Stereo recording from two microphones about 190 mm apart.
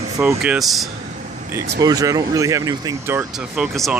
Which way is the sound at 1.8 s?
20° right (ahead or behind).